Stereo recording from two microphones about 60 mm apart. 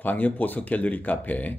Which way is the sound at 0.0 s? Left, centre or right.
Left.